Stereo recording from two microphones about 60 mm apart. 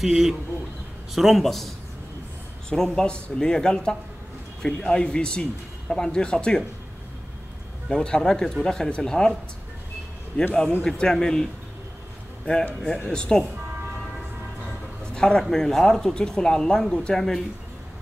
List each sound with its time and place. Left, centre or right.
0.0 s speech: centre
2.7 s speech: centre
7.9 s speech: centre
10.8 s speech: centre
12.5 s a man's voice: left
15.1 s speech: centre